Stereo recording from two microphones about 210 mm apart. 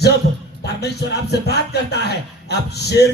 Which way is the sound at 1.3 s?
50° left (ahead or behind).